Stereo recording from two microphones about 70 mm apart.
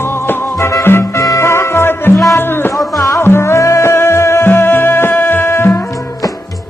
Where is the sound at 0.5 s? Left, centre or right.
Left.